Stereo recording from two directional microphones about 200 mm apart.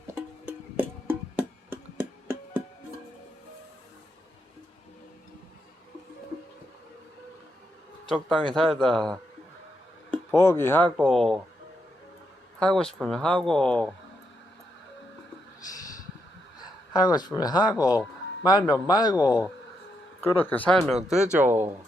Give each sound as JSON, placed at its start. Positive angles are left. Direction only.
{"t": 0.1, "sound": "music", "side_deg": -10}
{"t": 8.0, "sound": "a man's voice", "side_deg": 0}
{"t": 12.5, "sound": "speech", "side_deg": 5}
{"t": 16.9, "sound": "speech", "side_deg": 20}
{"t": 20.2, "sound": "speech", "side_deg": 10}